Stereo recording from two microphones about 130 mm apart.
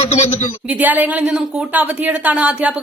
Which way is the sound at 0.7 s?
15° right (ahead or behind).